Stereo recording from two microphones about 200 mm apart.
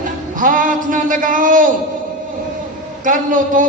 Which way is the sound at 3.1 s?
40° right (ahead or behind).